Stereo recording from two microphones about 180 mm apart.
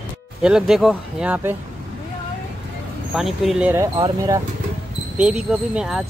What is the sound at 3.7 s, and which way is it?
Speech, 20° right (ahead or behind).